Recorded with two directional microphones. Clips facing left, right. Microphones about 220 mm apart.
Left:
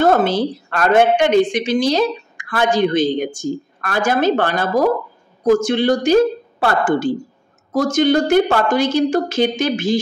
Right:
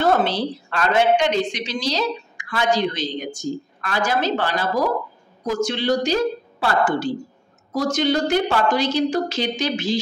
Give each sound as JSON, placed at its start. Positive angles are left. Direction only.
{"t": 0.0, "sound": "a woman's voice", "side_deg": 50}